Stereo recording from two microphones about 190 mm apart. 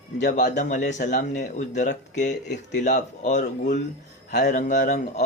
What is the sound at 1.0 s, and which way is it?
Speech, 55° left (ahead or behind).